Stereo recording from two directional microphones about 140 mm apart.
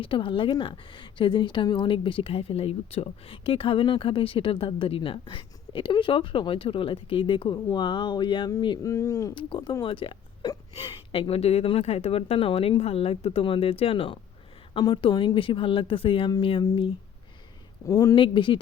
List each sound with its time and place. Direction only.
0.0 s speech: 40° left (ahead or behind)
8.9 s speech: 20° left (ahead or behind)
9.3 s speech: 35° left (ahead or behind)
17.8 s speech: 20° left (ahead or behind)
18.1 s speech: 35° left (ahead or behind)